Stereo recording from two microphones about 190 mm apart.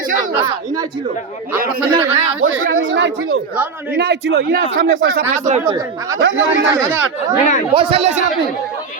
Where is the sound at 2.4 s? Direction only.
90° right.